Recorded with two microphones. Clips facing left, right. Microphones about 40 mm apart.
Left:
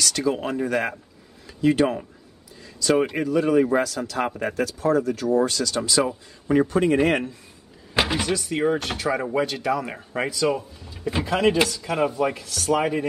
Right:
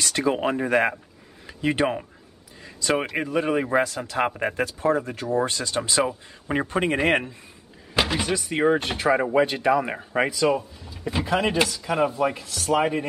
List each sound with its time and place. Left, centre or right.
0.0 s speech: right
2.6 s a sound: right
3.2 s speech: right
7.9 s door: centre
8.2 s speech: centre
10.9 s a man's voice: centre